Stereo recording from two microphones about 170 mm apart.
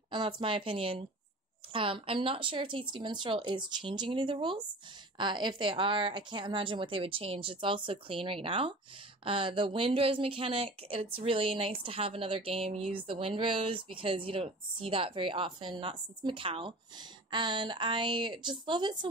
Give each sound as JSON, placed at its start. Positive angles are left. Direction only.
{"t": 0.1, "sound": "a woman's voice", "side_deg": -25}